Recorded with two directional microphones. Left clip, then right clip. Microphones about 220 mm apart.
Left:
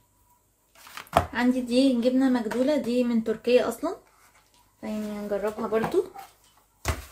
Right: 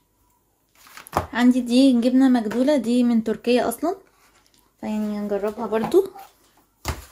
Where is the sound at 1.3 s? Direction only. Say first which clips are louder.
Right 5 dB; 50° right (ahead or behind).